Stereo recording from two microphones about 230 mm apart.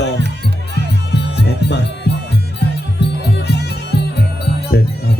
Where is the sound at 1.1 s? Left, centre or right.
Left.